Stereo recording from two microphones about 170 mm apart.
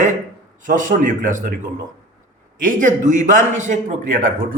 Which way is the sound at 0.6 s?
50° right (ahead or behind).